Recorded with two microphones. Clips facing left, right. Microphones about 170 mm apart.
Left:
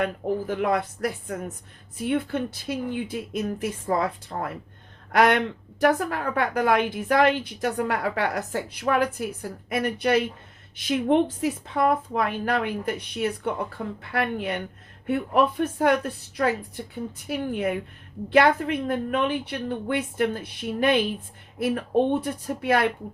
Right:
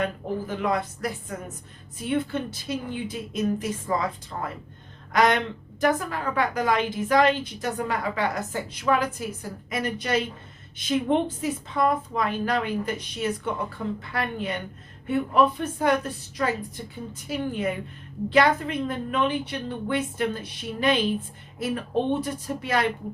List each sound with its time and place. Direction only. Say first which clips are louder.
0.0 s a woman's voice: left 2 dB; 55° left (ahead or behind)